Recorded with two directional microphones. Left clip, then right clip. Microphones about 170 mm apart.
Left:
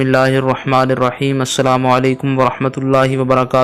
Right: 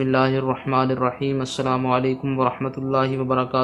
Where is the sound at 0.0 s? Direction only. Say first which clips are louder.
Left 7 dB; 40° left (ahead or behind).